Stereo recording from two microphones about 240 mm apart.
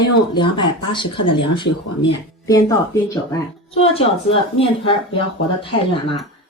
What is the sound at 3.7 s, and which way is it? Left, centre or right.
Speech, left.